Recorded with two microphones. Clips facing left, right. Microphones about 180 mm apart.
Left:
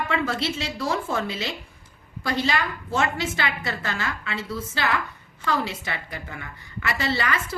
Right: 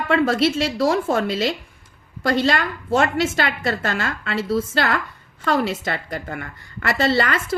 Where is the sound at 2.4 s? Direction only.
70° right (ahead or behind).